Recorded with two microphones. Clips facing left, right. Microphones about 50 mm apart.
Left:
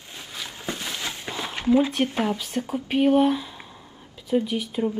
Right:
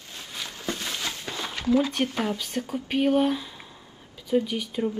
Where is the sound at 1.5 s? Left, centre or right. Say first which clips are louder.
Left 3 dB; left.